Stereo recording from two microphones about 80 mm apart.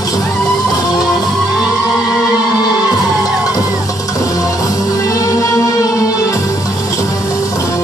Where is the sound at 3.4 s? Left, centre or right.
Left.